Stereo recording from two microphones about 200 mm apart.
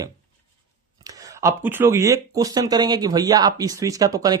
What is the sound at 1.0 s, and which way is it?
Speech, 15° right (ahead or behind).